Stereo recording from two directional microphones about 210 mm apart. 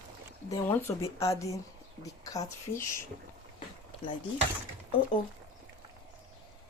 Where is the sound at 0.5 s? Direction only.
10° left (ahead or behind).